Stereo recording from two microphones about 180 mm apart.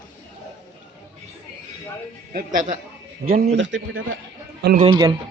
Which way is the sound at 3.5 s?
90° right.